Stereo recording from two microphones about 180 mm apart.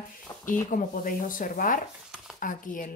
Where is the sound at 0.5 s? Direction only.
50° left (ahead or behind).